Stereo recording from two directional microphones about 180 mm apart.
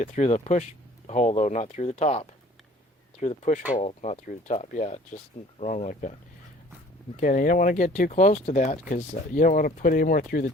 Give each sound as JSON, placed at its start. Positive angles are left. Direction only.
{"t": 0.0, "sound": "speech", "side_deg": 40}
{"t": 7.2, "sound": "speech", "side_deg": 45}